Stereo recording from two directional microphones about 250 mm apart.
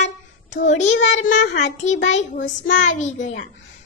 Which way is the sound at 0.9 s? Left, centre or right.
Left.